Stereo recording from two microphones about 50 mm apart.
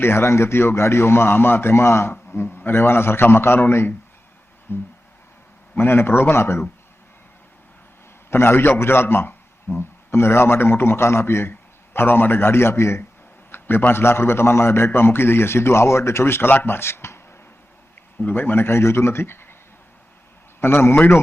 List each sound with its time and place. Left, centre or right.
0.0 s a man's voice: left
8.3 s a man's voice: left
11.9 s a man's voice: left
13.5 s a man's voice: left
16.5 s a man's voice: left
18.2 s a man's voice: left
20.6 s a man's voice: left